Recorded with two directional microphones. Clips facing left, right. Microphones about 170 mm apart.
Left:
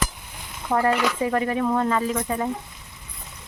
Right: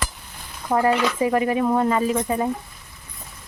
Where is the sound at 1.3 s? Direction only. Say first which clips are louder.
Right 3 dB; 10° right (ahead or behind).